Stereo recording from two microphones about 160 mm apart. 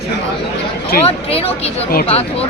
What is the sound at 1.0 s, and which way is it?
Speech, 40° left (ahead or behind).